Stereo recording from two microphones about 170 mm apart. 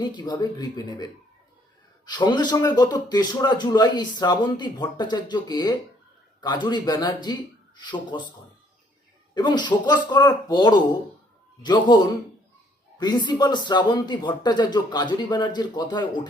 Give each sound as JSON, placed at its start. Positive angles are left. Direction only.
{"t": 0.0, "sound": "a man's voice", "side_deg": 25}
{"t": 2.0, "sound": "a man's voice", "side_deg": 25}
{"t": 9.3, "sound": "a man's voice", "side_deg": 25}
{"t": 13.0, "sound": "a man's voice", "side_deg": 25}